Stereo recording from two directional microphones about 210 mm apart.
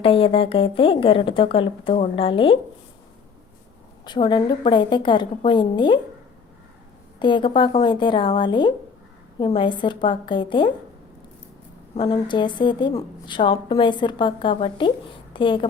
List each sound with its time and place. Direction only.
0.0 s a woman's voice: 25° left (ahead or behind)
4.0 s a woman's voice: 20° left (ahead or behind)
7.2 s a woman's voice: 20° left (ahead or behind)
11.9 s a woman's voice: 20° left (ahead or behind)